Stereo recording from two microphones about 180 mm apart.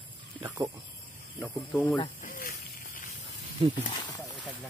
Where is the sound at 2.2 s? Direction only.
50° left (ahead or behind).